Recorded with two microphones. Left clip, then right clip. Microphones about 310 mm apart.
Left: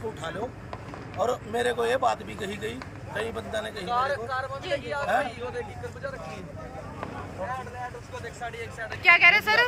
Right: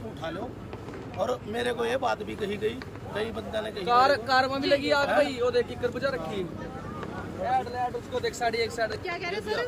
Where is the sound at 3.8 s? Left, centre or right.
Right.